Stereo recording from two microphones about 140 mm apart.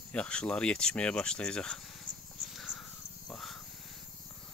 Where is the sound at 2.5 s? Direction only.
5° right (ahead or behind).